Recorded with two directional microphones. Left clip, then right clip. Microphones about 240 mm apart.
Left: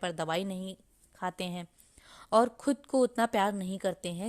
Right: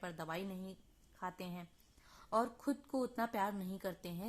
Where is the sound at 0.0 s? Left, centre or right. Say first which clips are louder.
Left 12 dB; left.